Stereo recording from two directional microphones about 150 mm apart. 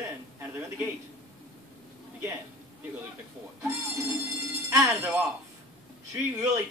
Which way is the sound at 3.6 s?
20° right (ahead or behind).